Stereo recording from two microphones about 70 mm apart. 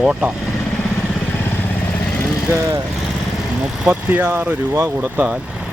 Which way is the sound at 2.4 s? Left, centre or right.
Right.